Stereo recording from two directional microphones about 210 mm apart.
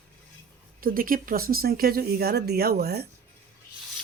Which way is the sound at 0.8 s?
40° right (ahead or behind).